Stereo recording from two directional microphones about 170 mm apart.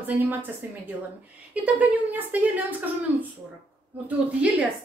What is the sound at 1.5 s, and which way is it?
A woman's voice, 10° right (ahead or behind).